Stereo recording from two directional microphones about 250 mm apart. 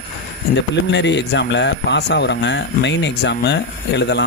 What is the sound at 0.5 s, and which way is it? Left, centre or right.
Speech, left.